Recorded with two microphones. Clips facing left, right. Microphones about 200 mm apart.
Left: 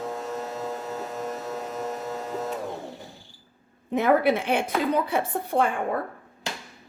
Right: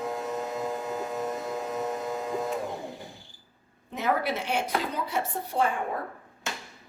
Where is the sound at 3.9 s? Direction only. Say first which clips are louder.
Left 7 dB; 55° left (ahead or behind).